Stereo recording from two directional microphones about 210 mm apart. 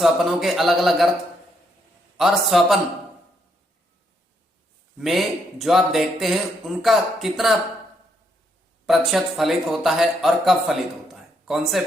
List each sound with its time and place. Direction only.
0.0 s speech: centre (ahead or behind)
2.1 s speech: centre (ahead or behind)
4.9 s speech: centre (ahead or behind)
8.9 s speech: centre (ahead or behind)